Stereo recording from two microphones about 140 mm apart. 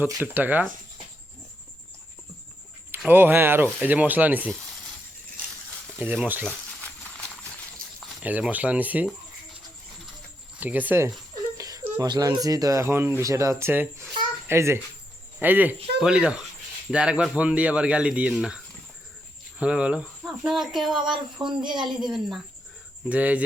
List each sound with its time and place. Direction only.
0.2 s speech: 15° right (ahead or behind)
3.1 s speech: 15° right (ahead or behind)
6.0 s speech: 15° right (ahead or behind)
6.4 s a sound: 10° left (ahead or behind)
8.2 s speech: 10° right (ahead or behind)
10.6 s speech: 10° right (ahead or behind)
11.5 s a sound: 25° right (ahead or behind)
11.9 s a child's voice: 30° right (ahead or behind); by 21.0 s centre (ahead or behind)
21.0 s speech: 30° right (ahead or behind)
22.0 s speech: centre (ahead or behind)